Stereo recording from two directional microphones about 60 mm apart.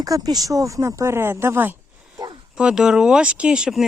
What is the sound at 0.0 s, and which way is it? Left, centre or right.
Speech, right.